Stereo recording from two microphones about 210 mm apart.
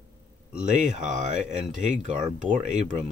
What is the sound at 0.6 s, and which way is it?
Speech, 35° right (ahead or behind).